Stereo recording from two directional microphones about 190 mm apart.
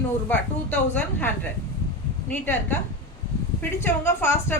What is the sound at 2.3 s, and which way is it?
A woman's voice, 10° left (ahead or behind).